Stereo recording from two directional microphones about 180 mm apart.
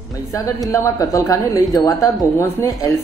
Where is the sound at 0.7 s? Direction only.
20° left (ahead or behind).